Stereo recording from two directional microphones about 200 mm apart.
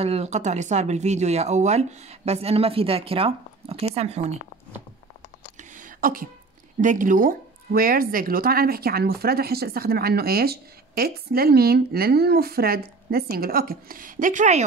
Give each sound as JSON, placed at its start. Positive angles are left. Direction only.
{"t": 0.0, "sound": "speech", "side_deg": -30}
{"t": 5.6, "sound": "a sound", "side_deg": -40}
{"t": 6.8, "sound": "speech", "side_deg": -40}